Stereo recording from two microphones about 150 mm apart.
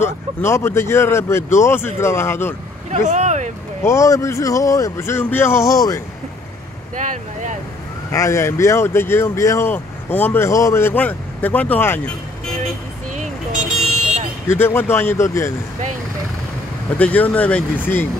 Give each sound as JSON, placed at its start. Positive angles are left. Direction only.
{"t": 0.5, "sound": "speech", "side_deg": 15}
{"t": 2.9, "sound": "vehicle", "side_deg": -50}
{"t": 3.8, "sound": "speech", "side_deg": 20}
{"t": 7.0, "sound": "vehicle", "side_deg": -55}
{"t": 8.1, "sound": "speech", "side_deg": 20}
{"t": 14.5, "sound": "speech", "side_deg": 15}
{"t": 17.0, "sound": "speech", "side_deg": 10}